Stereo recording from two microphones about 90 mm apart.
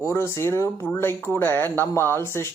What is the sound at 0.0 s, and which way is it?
Speech, 30° left (ahead or behind).